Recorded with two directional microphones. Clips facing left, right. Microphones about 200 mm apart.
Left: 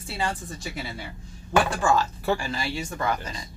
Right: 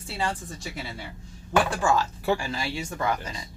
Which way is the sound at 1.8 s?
15° right (ahead or behind).